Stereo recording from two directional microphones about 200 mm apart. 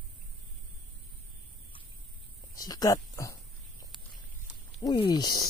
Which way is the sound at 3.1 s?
15° left (ahead or behind).